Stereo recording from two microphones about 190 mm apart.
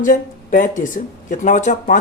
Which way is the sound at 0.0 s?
45° left (ahead or behind).